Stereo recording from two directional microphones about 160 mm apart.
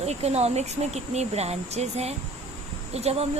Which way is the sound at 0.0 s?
40° right (ahead or behind).